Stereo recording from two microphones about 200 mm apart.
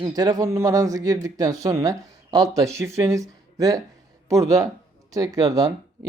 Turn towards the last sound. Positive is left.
turn(degrees=-20)  # may be behind; listen again after turning